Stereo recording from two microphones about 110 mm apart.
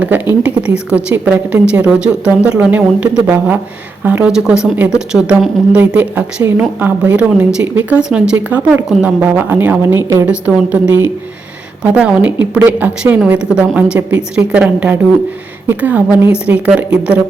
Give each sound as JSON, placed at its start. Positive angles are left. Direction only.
{"t": 0.4, "sound": "a woman's voice", "side_deg": -10}